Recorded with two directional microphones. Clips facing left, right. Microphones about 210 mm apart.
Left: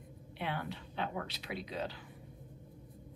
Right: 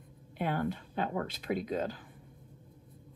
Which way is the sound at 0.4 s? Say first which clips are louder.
Right 7 dB; 45° right (ahead or behind).